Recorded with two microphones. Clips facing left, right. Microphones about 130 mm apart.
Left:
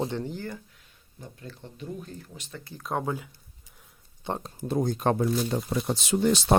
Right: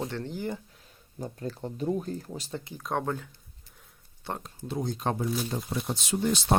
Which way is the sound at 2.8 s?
5° left (ahead or behind).